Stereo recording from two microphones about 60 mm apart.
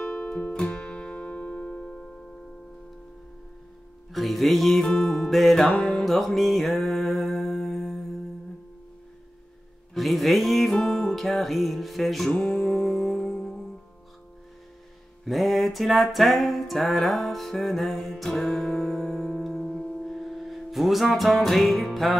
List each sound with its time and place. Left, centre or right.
0.0 s music: centre
4.1 s music: centre
9.9 s music: centre
12.3 s music: left
15.2 s music: centre